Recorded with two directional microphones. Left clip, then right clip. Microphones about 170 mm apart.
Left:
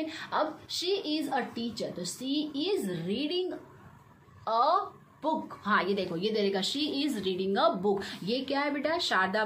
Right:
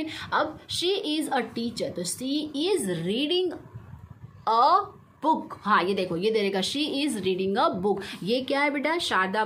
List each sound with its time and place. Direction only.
0.0 s a woman's voice: 40° right (ahead or behind)